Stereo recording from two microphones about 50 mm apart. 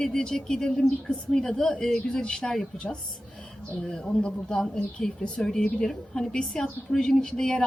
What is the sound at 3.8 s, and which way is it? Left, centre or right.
A woman's voice, centre.